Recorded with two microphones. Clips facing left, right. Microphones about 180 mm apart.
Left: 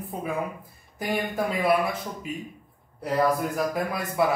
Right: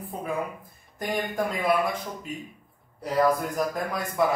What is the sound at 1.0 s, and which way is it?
Speech, 5° left (ahead or behind).